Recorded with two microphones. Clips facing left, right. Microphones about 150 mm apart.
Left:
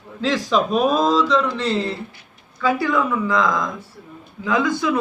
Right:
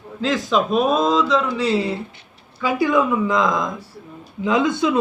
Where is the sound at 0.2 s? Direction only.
Centre (ahead or behind).